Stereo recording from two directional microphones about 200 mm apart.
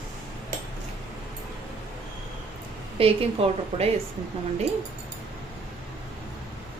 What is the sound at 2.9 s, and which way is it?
Speech, 30° right (ahead or behind).